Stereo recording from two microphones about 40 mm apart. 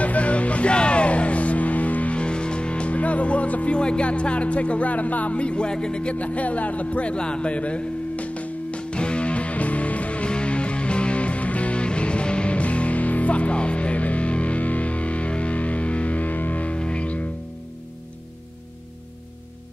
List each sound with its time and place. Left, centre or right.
0.0 s music: left
3.7 s music: left